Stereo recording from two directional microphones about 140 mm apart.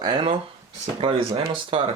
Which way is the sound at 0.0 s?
35° right (ahead or behind).